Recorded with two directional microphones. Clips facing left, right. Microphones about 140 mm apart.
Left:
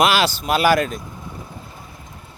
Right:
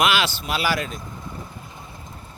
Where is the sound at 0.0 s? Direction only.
40° left (ahead or behind).